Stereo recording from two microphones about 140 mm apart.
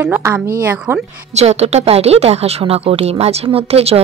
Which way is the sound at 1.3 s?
50° right (ahead or behind).